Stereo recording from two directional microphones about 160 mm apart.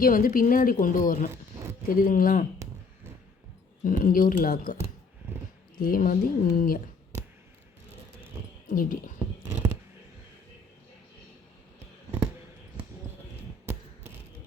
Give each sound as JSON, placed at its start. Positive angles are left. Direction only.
{"t": 0.0, "sound": "a woman's voice", "side_deg": 60}
{"t": 3.8, "sound": "a woman's voice", "side_deg": 60}
{"t": 5.8, "sound": "a woman's voice", "side_deg": 60}
{"t": 8.6, "sound": "a woman's voice", "side_deg": 60}
{"t": 9.4, "sound": "a sound", "side_deg": -10}